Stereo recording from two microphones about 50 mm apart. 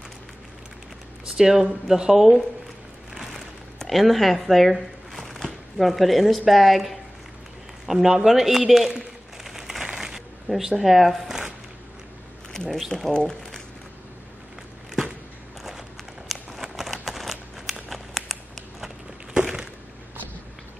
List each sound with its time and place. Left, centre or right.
1.2 s speech: centre
3.8 s speech: centre
7.8 s a sound: centre
10.8 s speech: centre
12.7 s speech: centre
16.3 s a sound: centre